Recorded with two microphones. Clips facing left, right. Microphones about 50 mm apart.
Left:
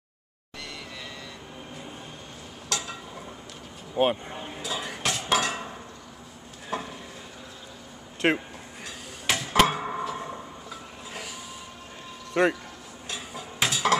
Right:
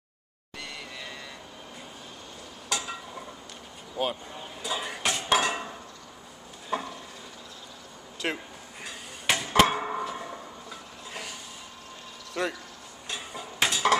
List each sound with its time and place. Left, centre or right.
2.7 s a sound: centre
3.9 s speech: left
4.6 s dishes: centre
6.7 s stir: centre
8.2 s speech: left
8.8 s a sound: centre
12.4 s speech: left
13.1 s cutlery: centre